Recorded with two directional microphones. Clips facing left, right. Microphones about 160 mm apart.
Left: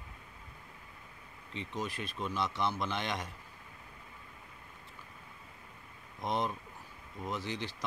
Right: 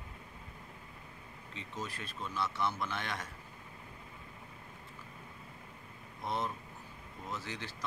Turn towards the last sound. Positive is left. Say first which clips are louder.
# left 4 dB
turn(degrees=20)  # may be behind; listen again after turning